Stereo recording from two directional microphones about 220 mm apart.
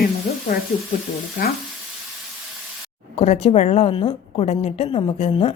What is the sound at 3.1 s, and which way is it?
A woman's voice, 30° left (ahead or behind).